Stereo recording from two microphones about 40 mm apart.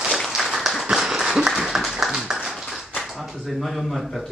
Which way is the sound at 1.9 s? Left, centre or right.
Centre.